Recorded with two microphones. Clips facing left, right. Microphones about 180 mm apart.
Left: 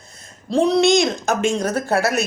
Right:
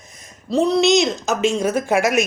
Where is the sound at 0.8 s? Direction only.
55° left (ahead or behind).